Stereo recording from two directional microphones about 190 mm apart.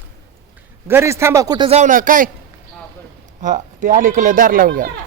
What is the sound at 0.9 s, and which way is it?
Speech, 15° right (ahead or behind).